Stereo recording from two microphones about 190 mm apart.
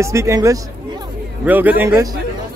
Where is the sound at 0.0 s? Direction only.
15° right (ahead or behind).